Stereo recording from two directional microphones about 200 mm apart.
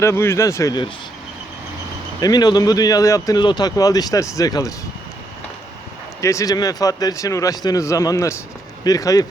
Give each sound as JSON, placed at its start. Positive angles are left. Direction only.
{"t": 0.0, "sound": "speech", "side_deg": 15}
{"t": 2.2, "sound": "speech", "side_deg": 20}
{"t": 6.2, "sound": "speech", "side_deg": 15}